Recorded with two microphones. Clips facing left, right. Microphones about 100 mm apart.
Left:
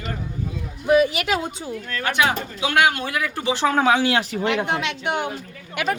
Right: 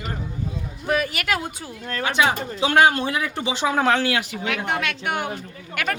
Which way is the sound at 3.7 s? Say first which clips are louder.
Left 1 dB; centre (ahead or behind).